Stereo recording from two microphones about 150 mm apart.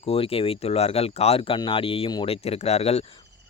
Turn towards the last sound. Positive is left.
turn(degrees=45)  # may be behind; listen again after turning